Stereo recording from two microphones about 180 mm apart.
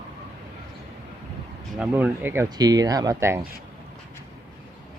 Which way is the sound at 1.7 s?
5° right (ahead or behind).